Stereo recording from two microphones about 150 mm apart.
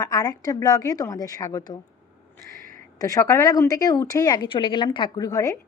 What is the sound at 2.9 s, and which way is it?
Speech, 25° left (ahead or behind).